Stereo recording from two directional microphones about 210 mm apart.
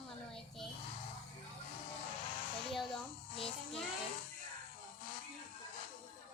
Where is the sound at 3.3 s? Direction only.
25° left (ahead or behind).